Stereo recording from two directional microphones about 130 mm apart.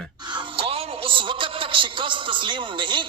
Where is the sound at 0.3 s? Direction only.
45° right (ahead or behind).